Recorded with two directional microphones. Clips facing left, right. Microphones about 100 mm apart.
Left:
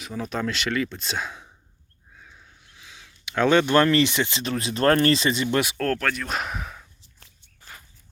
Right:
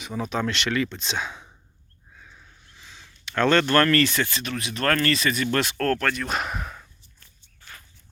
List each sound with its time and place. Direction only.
0.0 s speech: centre (ahead or behind); by 5.5 s 25° left (ahead or behind)
5.5 s speech: 5° left (ahead or behind)
7.0 s a sound: 90° left